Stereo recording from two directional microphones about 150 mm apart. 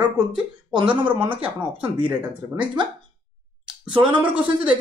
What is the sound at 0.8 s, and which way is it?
Speech, 10° right (ahead or behind).